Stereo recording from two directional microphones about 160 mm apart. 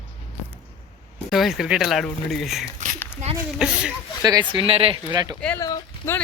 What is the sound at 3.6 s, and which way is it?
Speech, 5° right (ahead or behind).